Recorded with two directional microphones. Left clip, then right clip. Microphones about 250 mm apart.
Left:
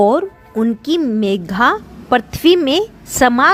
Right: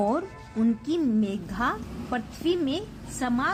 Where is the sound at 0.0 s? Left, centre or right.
Left.